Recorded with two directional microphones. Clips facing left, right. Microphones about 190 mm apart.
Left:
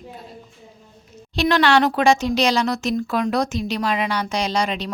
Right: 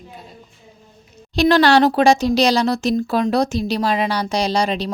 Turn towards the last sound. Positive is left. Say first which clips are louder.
# right 3 dB
turn(degrees=-35)  # may be behind; listen again after turning